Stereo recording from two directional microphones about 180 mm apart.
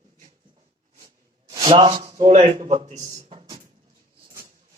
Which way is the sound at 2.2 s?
40° right (ahead or behind).